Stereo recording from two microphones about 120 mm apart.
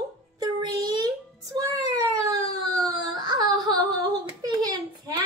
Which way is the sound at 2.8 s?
40° right (ahead or behind).